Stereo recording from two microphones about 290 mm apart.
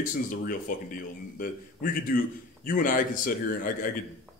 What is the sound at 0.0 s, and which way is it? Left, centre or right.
Speech, left.